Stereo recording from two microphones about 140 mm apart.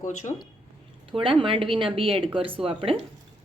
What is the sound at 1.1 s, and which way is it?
A woman's voice, 40° right (ahead or behind).